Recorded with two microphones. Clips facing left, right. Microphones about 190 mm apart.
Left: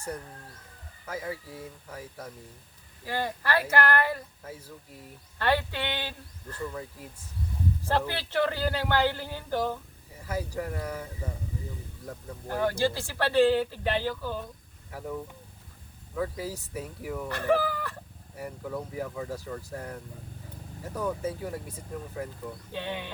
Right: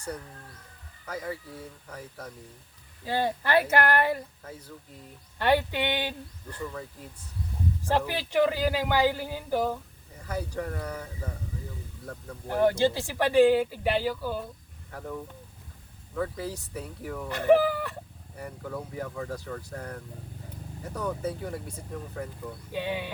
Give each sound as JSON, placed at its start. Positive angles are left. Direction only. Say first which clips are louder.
{"t": 1.0, "sound": "speech", "louder": "even", "side_deg": 5}
{"t": 3.0, "sound": "speech", "louder": "right 4 dB", "side_deg": -20}
{"t": 5.4, "sound": "speech", "louder": "right 3 dB", "side_deg": -15}
{"t": 6.6, "sound": "speech", "louder": "left 1 dB", "side_deg": 0}
{"t": 7.9, "sound": "speech", "louder": "right 2 dB", "side_deg": -15}
{"t": 10.2, "sound": "speech", "louder": "even", "side_deg": 5}
{"t": 12.5, "sound": "speech", "louder": "right 4 dB", "side_deg": -15}
{"t": 14.8, "sound": "speech", "louder": "left 1 dB", "side_deg": 5}
{"t": 17.2, "sound": "speech", "louder": "right 5 dB", "side_deg": -15}
{"t": 18.3, "sound": "speech", "louder": "left 1 dB", "side_deg": 5}
{"t": 22.7, "sound": "speech", "louder": "right 4 dB", "side_deg": -10}